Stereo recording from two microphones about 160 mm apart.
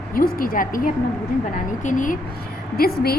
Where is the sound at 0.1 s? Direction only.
60° left (ahead or behind).